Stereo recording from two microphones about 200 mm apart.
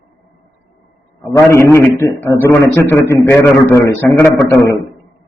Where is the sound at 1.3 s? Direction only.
15° left (ahead or behind).